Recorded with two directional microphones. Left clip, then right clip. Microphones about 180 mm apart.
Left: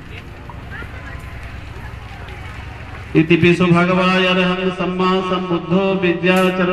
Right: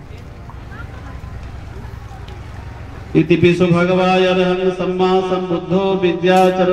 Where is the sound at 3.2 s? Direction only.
65° right (ahead or behind).